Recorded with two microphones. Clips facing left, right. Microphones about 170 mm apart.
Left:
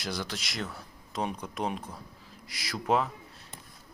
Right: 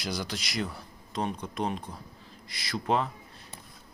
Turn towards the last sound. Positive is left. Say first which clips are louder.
# even
turn(degrees=5)  # may be behind; listen again after turning